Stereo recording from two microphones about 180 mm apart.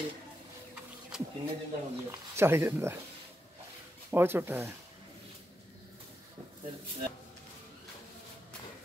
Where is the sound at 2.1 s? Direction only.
15° right (ahead or behind).